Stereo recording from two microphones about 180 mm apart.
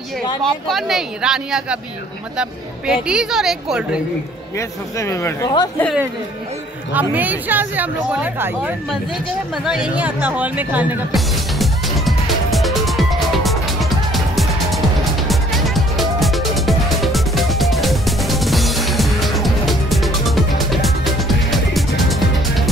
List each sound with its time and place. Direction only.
0.4 s speech: centre (ahead or behind)
2.9 s speech: 5° right (ahead or behind)
4.6 s speech: 15° left (ahead or behind)
6.9 s speech: 10° right (ahead or behind)
9.7 s music: 5° right (ahead or behind)